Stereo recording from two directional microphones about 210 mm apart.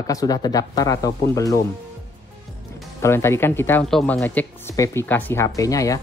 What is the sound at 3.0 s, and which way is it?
Speech, 10° left (ahead or behind).